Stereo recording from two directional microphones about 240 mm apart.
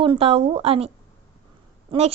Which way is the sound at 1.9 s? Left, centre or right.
Right.